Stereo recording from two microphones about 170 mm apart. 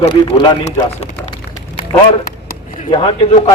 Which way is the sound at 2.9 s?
30° left (ahead or behind).